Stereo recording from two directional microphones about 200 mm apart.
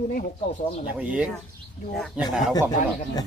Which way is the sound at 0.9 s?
5° right (ahead or behind).